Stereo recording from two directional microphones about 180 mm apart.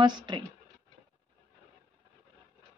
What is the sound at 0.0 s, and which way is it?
Speech, 25° right (ahead or behind).